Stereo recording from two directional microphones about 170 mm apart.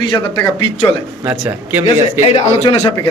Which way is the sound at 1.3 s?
10° right (ahead or behind).